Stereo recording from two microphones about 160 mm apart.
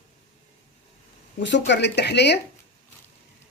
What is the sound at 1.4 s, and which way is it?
Speech, 90° left.